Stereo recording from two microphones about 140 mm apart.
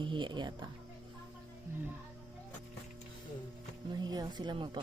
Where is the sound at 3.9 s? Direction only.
30° right (ahead or behind).